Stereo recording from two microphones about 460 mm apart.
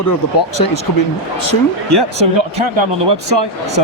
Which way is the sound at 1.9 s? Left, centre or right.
Right.